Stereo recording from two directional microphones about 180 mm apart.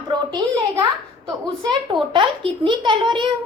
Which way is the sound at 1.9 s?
25° right (ahead or behind).